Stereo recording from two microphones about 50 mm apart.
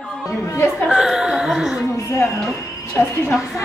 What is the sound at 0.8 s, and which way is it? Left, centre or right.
Chuckle, centre.